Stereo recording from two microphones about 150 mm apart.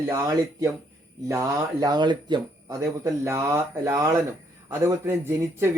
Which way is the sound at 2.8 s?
20° right (ahead or behind).